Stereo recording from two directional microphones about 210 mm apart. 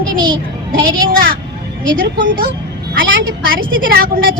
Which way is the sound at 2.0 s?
55° right (ahead or behind).